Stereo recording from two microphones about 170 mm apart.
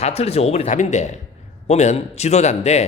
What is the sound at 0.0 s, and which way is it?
A man's voice, 35° left (ahead or behind).